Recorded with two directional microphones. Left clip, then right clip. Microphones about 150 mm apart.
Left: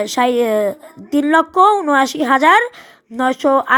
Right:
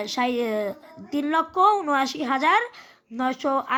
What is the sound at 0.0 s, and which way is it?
Speech, 35° left (ahead or behind).